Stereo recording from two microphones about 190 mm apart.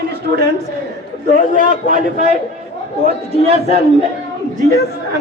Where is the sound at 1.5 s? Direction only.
45° right (ahead or behind).